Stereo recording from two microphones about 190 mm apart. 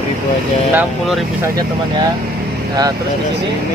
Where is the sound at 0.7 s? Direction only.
Centre (ahead or behind).